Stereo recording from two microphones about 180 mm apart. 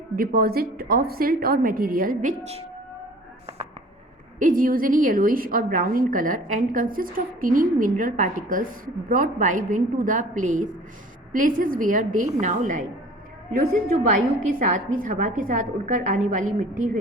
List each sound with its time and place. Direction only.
0.2 s a woman's voice: 55° right (ahead or behind)
4.4 s a woman's voice: 50° right (ahead or behind)
13.5 s a woman's voice: 55° right (ahead or behind)